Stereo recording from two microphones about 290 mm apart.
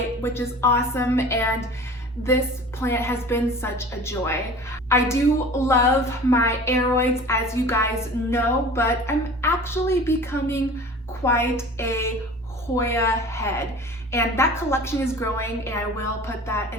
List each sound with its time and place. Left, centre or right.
0.2 s a woman's voice: centre
2.8 s a woman's voice: centre